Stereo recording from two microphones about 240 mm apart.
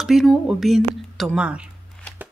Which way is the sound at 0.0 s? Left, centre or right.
Centre.